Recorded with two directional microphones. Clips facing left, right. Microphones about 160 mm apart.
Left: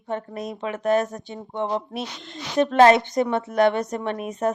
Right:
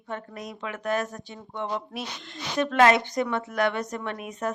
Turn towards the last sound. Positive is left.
turn(degrees=25)  # may be behind; listen again after turning